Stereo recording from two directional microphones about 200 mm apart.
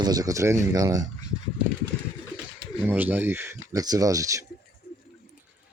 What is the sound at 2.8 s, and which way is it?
Speech, 10° right (ahead or behind).